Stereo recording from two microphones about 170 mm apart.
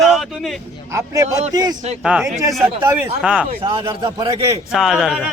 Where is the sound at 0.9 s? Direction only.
15° right (ahead or behind).